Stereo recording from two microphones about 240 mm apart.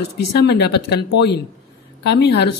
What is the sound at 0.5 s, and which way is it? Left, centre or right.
A woman's voice, left.